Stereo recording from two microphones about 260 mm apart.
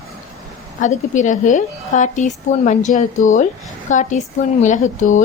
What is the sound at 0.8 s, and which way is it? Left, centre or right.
A woman's voice, left.